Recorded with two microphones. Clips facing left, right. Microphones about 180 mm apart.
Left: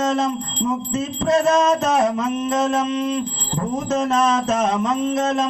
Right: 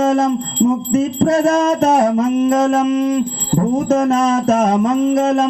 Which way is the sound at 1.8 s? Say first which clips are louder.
Right 6 dB; 30° right (ahead or behind).